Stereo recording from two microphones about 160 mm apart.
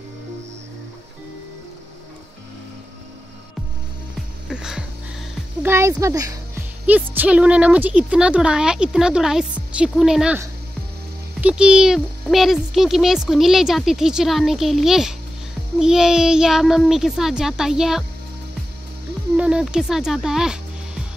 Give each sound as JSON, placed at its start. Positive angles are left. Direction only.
{"t": 4.5, "sound": "music", "side_deg": -5}
{"t": 5.6, "sound": "speech", "side_deg": -15}
{"t": 6.9, "sound": "speech", "side_deg": -10}
{"t": 11.4, "sound": "speech", "side_deg": -5}
{"t": 19.3, "sound": "speech", "side_deg": -5}